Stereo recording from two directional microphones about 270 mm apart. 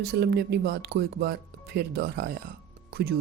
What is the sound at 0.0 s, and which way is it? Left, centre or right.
Speech, right.